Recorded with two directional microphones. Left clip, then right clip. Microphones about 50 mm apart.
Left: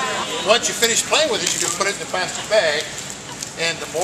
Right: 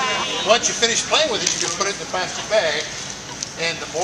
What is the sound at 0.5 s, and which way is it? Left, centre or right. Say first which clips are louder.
Speech: even; left.